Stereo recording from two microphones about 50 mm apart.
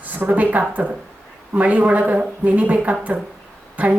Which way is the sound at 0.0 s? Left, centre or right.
Right.